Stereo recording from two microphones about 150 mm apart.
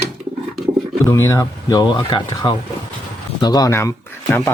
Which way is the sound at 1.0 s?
20° left (ahead or behind).